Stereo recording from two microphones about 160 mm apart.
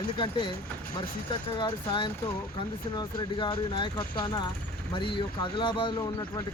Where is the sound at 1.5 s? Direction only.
30° left (ahead or behind).